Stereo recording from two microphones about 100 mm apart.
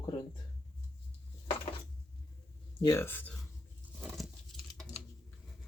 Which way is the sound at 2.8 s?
25° left (ahead or behind).